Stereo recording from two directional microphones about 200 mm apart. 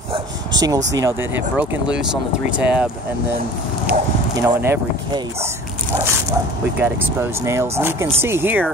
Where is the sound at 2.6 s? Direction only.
5° right (ahead or behind).